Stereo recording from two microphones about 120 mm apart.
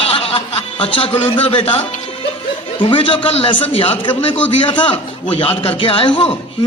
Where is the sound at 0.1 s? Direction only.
55° left (ahead or behind).